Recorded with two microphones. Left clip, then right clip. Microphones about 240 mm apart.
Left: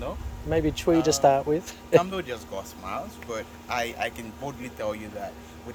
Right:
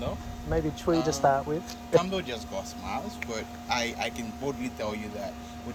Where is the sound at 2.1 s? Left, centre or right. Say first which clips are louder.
Even; centre.